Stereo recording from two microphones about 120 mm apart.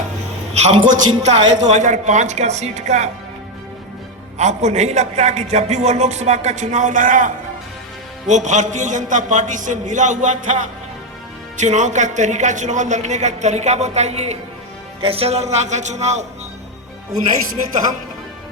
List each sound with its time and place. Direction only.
0.5 s a man's voice: 65° right (ahead or behind)
4.4 s a man's voice: 70° right (ahead or behind); by 7.3 s 90° right
8.3 s a man's voice: 85° right; by 14.3 s 65° right (ahead or behind)
15.0 s a man's voice: 55° right (ahead or behind)